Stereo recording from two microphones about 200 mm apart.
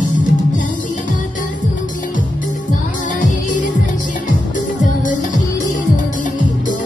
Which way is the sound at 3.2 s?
40° left (ahead or behind).